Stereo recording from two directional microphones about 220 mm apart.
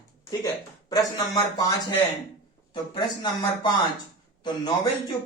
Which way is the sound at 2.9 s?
20° left (ahead or behind).